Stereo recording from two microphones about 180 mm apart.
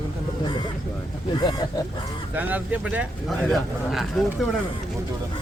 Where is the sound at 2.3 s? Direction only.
10° right (ahead or behind).